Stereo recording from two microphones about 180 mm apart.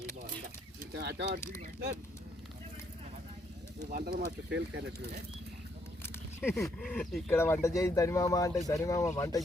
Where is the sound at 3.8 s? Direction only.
60° right (ahead or behind).